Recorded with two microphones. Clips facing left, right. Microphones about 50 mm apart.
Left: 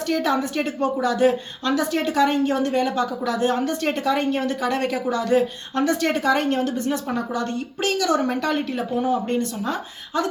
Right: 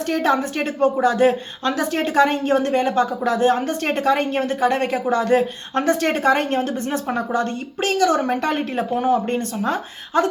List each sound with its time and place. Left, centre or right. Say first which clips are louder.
0.1 s a woman's voice: right 2 dB; right